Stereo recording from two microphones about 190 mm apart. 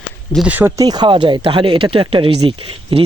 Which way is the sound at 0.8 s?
20° right (ahead or behind).